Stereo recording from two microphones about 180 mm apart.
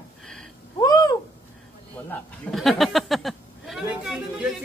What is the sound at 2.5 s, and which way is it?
Speech, centre (ahead or behind).